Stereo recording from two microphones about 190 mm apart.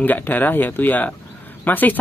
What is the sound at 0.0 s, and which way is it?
Speech, 10° left (ahead or behind).